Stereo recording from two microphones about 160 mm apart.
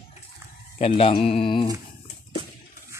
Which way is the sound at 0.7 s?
40° left (ahead or behind).